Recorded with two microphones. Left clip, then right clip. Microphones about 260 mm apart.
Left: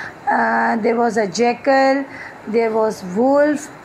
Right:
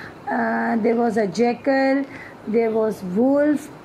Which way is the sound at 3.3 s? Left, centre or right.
Centre.